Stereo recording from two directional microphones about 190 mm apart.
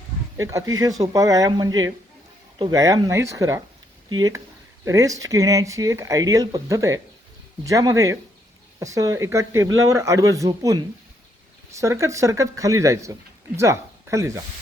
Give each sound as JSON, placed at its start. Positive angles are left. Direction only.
{"t": 0.3, "sound": "speech", "side_deg": -15}